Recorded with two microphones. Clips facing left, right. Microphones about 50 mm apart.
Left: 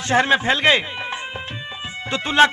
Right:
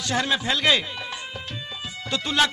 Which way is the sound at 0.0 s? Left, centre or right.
Left.